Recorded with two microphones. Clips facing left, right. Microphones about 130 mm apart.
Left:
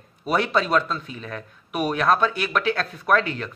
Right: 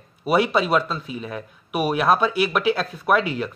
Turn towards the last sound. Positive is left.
turn(degrees=-10)  # may be behind; listen again after turning